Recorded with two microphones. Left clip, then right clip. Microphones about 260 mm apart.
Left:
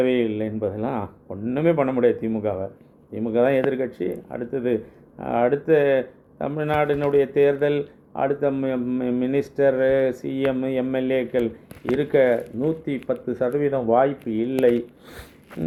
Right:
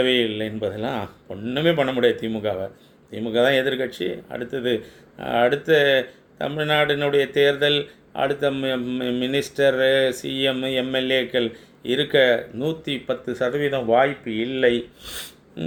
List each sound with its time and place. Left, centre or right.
0.0 s speech: right